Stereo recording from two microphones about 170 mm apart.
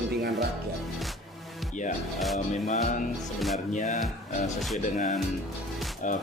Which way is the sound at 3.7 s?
45° left (ahead or behind).